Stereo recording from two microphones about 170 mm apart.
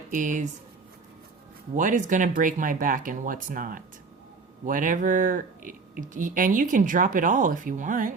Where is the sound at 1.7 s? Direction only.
50° right (ahead or behind).